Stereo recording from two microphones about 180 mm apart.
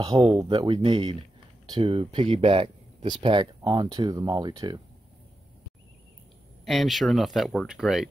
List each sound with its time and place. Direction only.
0.4 s speech: 25° right (ahead or behind)
6.6 s speech: centre (ahead or behind)